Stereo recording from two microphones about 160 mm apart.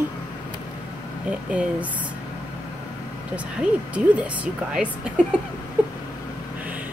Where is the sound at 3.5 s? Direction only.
10° right (ahead or behind).